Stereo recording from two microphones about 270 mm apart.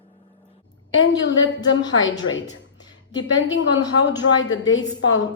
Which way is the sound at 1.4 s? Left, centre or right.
Centre.